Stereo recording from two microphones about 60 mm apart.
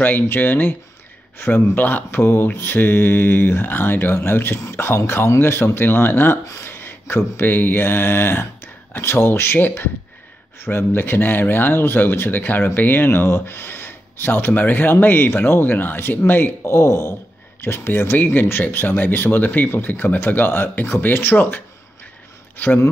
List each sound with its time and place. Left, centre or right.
0.0 s speech: left
6.6 s a sound: left
7.3 s speech: left
16.6 s speech: left